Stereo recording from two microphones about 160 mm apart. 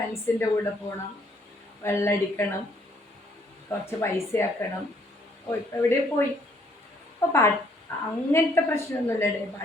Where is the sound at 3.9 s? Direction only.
15° left (ahead or behind).